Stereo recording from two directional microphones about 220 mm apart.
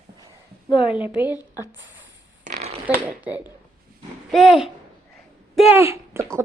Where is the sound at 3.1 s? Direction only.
5° right (ahead or behind).